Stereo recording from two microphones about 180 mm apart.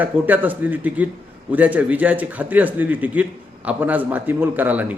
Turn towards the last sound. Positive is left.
turn(degrees=-10)  # may be behind; listen again after turning